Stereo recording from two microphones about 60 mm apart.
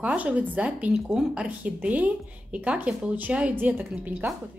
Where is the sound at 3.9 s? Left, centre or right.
Right.